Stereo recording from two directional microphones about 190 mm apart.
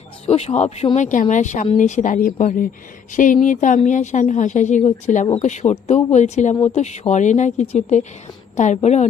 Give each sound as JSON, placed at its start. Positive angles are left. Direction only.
{"t": 0.3, "sound": "a woman's voice", "side_deg": 35}